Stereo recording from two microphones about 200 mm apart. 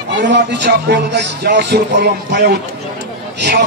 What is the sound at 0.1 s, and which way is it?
Music, 60° right (ahead or behind).